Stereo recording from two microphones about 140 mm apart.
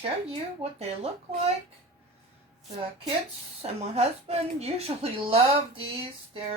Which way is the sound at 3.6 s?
45° right (ahead or behind).